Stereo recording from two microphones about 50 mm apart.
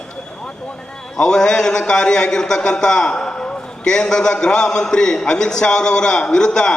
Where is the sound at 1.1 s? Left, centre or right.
Centre.